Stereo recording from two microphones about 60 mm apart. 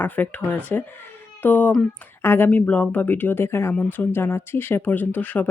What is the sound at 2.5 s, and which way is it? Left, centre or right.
Speech, left.